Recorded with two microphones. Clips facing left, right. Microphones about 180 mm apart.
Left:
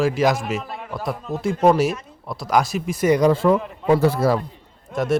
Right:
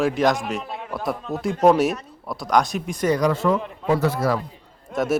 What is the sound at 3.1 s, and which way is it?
Speech, 25° left (ahead or behind).